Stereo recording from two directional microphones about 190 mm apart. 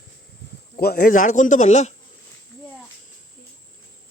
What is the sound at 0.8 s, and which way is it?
A man's voice, 55° left (ahead or behind).